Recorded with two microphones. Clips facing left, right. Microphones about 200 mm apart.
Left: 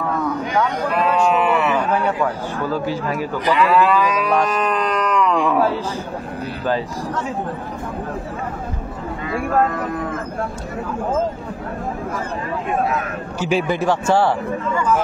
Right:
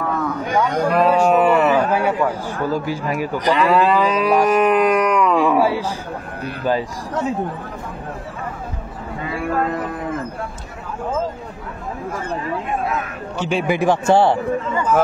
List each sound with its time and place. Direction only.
0.5 s livestock: 45° right (ahead or behind)
2.0 s a man's voice: 10° right (ahead or behind)
3.4 s moo: 40° right (ahead or behind)
3.8 s moo: 15° right (ahead or behind)
13.4 s speech: 5° left (ahead or behind)
13.7 s a man's voice: 15° right (ahead or behind)